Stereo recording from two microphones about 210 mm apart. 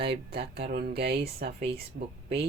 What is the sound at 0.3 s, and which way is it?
Speech, 50° right (ahead or behind).